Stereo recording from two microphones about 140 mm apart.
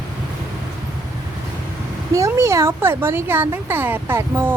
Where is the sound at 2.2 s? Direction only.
20° right (ahead or behind).